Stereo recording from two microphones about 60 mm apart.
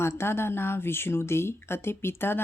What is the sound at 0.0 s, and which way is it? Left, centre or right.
Speech, left.